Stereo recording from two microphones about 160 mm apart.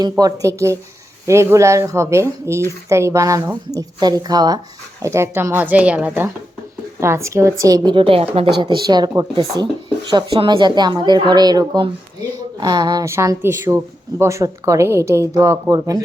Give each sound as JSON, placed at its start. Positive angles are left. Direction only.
{"t": 0.0, "sound": "speech", "side_deg": -25}
{"t": 8.6, "sound": "speech", "side_deg": -25}